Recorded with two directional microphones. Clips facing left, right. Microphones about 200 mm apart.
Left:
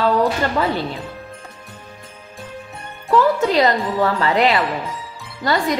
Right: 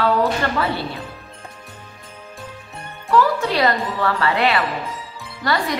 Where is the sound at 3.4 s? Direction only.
20° left (ahead or behind).